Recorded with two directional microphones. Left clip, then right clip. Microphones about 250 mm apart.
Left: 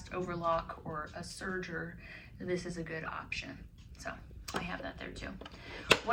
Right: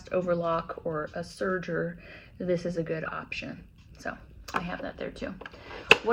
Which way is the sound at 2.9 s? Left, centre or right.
Right.